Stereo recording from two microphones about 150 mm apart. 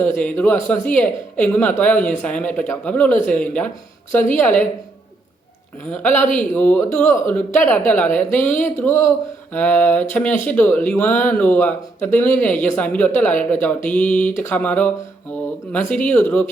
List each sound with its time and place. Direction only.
0.0 s speech: 15° left (ahead or behind)
6.0 s speech: 10° left (ahead or behind)
16.0 s speech: 10° left (ahead or behind)